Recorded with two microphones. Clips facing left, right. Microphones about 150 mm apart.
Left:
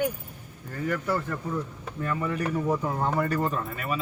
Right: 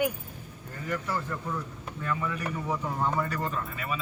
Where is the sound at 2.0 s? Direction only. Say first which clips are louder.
Left 4 dB; 40° left (ahead or behind).